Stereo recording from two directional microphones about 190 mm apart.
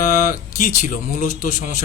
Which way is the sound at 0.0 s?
40° left (ahead or behind).